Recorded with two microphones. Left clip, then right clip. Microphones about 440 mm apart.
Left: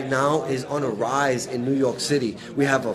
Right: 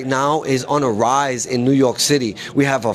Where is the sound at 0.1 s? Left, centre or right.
Right.